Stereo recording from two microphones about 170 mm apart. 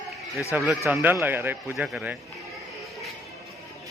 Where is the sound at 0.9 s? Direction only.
10° right (ahead or behind).